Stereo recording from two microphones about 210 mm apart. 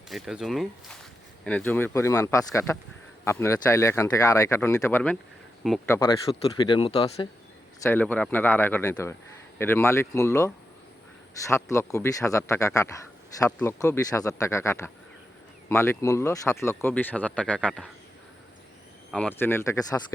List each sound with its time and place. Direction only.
0.1 s speech: centre (ahead or behind)
5.6 s speech: centre (ahead or behind)
6.6 s speech: 20° left (ahead or behind)
7.8 s speech: 10° left (ahead or behind)
19.1 s speech: 5° left (ahead or behind)